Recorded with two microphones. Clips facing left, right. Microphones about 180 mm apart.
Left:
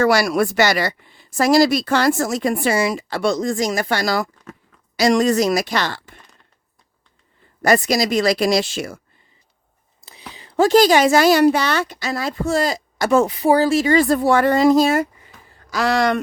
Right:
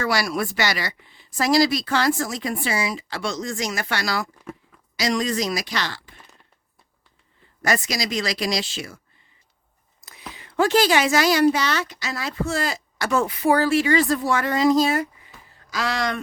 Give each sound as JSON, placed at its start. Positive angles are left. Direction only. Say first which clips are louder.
{"t": 0.0, "sound": "speech", "louder": "left 8 dB", "side_deg": 45}
{"t": 3.6, "sound": "speech", "louder": "left 7 dB", "side_deg": 45}
{"t": 7.6, "sound": "speech", "louder": "left 8 dB", "side_deg": 55}
{"t": 10.3, "sound": "speech", "louder": "left 6 dB", "side_deg": 35}
{"t": 11.1, "sound": "speech", "louder": "left 5 dB", "side_deg": 55}
{"t": 13.3, "sound": "speech", "louder": "left 3 dB", "side_deg": 35}